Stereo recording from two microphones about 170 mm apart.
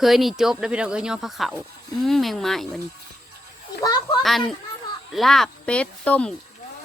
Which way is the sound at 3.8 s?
25° left (ahead or behind).